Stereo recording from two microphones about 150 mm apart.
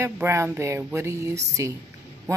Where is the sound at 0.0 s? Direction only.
20° right (ahead or behind).